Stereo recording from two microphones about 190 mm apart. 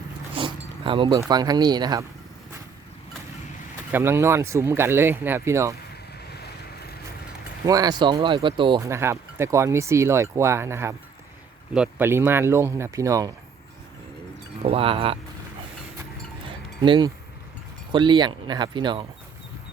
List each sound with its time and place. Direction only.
0.3 s zipper: 25° right (ahead or behind)
1.3 s speech: 20° right (ahead or behind)
3.9 s speech: 15° right (ahead or behind)
7.6 s speech: 20° right (ahead or behind)
14.6 s speech: 30° right (ahead or behind)
16.5 s cowbell: 25° right (ahead or behind)
17.9 s speech: 25° right (ahead or behind)